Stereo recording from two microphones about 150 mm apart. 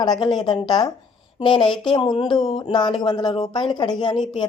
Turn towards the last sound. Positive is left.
turn(degrees=30)  # may be behind; listen again after turning